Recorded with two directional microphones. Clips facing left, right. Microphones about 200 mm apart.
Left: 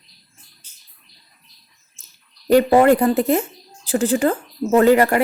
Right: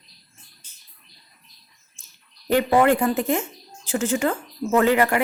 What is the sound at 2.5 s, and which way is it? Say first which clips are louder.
A woman's voice: left 5 dB; 35° left (ahead or behind).